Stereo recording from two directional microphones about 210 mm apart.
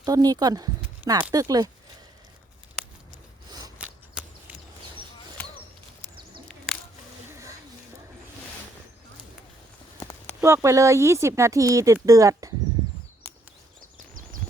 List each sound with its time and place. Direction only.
0.0 s speech: 15° right (ahead or behind)
3.8 s a sound: 5° right (ahead or behind)
10.0 s clip-clop: 10° left (ahead or behind)
10.4 s speech: 15° right (ahead or behind)